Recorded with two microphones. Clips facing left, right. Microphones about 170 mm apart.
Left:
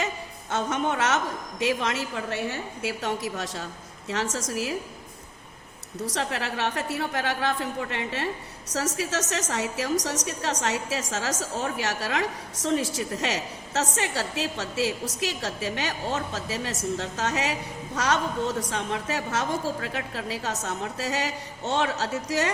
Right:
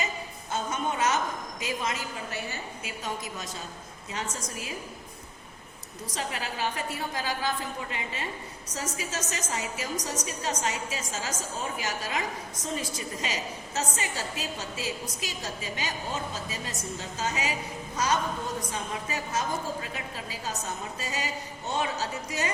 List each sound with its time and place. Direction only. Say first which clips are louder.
0.5 s a woman's voice: left 4 dB; 75° left (ahead or behind)
6.1 s a woman's voice: left 4 dB; 75° left (ahead or behind)